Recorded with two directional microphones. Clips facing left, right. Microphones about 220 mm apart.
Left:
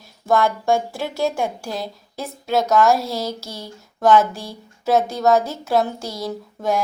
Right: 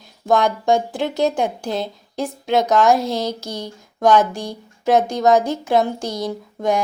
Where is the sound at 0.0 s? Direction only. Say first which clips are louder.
Right 1 dB; 15° right (ahead or behind).